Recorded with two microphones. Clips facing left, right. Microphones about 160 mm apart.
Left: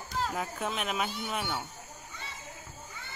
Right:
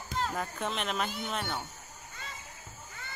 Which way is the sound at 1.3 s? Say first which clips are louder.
Left 1 dB; 10° left (ahead or behind).